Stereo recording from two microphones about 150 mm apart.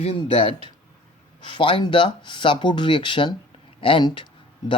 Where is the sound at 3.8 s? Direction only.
35° left (ahead or behind).